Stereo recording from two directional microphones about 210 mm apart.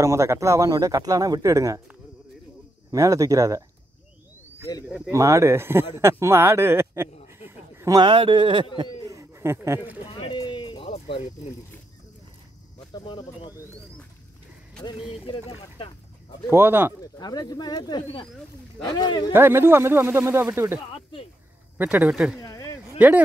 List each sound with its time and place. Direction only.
0.0 s speech: 15° right (ahead or behind)
4.8 s speech: 5° right (ahead or behind)
7.3 s a sound: 10° right (ahead or behind)
10.2 s a sound: 20° left (ahead or behind)
12.9 s speech: 20° left (ahead or behind)
14.8 s speech: 20° left (ahead or behind)
16.4 s speech: 10° right (ahead or behind)
17.0 s speech: 20° left (ahead or behind)
19.3 s speech: 10° right (ahead or behind)
20.9 s speech: 25° left (ahead or behind)
21.7 s speech: 10° right (ahead or behind)
22.4 s a sound: 15° left (ahead or behind)
22.9 s speech: 5° right (ahead or behind)